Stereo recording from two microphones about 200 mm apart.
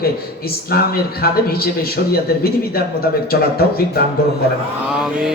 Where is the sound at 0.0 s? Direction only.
50° left (ahead or behind).